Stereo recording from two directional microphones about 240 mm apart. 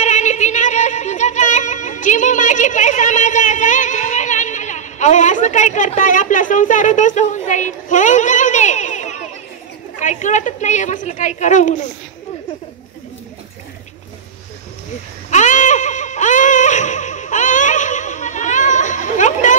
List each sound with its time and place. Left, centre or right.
0.0 s music: left
9.9 s a woman's voice: left
15.2 s a sound: left